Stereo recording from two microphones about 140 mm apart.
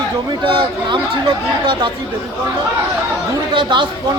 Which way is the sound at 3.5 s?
35° right (ahead or behind).